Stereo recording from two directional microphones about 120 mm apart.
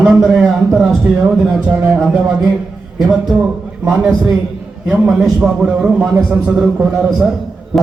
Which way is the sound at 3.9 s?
20° right (ahead or behind).